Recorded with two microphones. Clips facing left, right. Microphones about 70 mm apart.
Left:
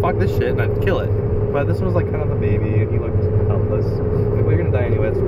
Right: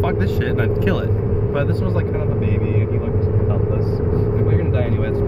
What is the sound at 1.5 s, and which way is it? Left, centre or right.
Vehicle, centre.